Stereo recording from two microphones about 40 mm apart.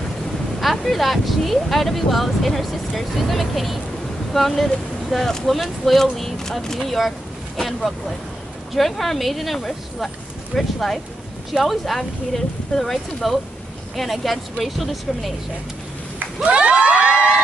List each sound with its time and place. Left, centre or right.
0.8 s speech: centre
16.4 s crowd: right